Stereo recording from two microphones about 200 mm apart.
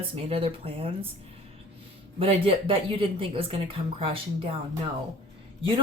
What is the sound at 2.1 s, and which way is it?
Speech, 30° right (ahead or behind).